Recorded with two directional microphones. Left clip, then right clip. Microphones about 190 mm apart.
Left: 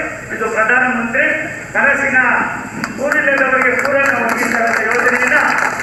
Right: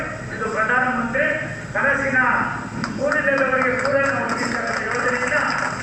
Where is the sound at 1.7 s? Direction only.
30° left (ahead or behind).